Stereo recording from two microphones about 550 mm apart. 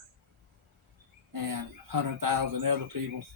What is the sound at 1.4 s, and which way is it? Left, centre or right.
Speech, right.